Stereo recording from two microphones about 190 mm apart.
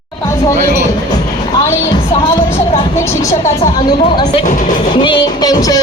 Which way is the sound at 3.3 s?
40° left (ahead or behind).